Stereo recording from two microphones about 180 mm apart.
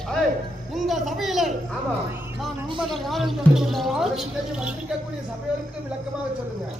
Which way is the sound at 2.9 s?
Centre (ahead or behind).